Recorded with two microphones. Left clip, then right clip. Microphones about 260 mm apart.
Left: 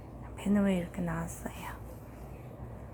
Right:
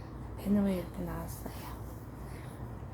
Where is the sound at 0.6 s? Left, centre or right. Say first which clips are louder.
Left 3 dB; left.